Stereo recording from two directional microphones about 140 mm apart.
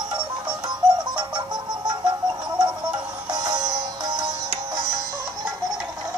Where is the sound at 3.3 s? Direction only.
30° right (ahead or behind).